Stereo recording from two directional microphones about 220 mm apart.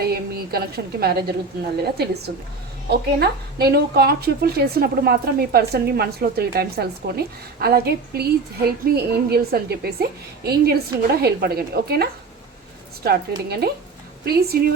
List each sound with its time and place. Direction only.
0.0 s a woman's voice: 45° right (ahead or behind)
13.1 s a woman's voice: 45° right (ahead or behind)